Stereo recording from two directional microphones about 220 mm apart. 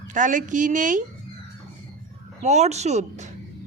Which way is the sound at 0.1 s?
35° right (ahead or behind).